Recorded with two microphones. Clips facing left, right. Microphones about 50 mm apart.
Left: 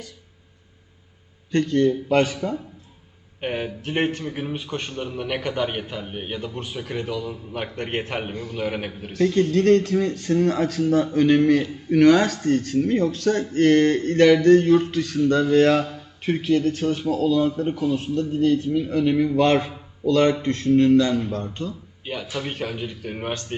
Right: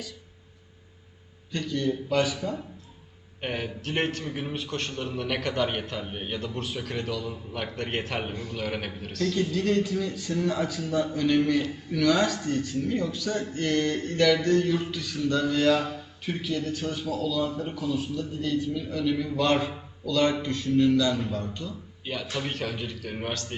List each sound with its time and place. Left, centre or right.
1.5 s speech: left
3.4 s a man's voice: centre
4.2 s a man's voice: centre
9.3 s a man's voice: left
22.0 s a man's voice: centre